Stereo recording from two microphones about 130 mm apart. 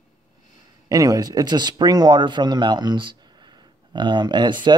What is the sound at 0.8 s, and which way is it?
Speech, 25° right (ahead or behind).